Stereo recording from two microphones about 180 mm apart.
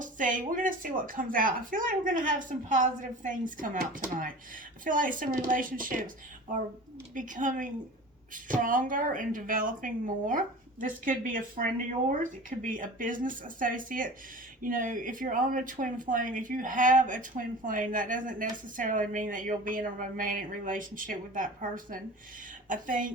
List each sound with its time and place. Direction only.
0.0 s speech: 45° right (ahead or behind)